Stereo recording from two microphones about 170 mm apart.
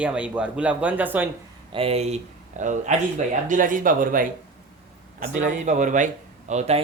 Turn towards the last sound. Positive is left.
turn(degrees=-40)  # may be behind; listen again after turning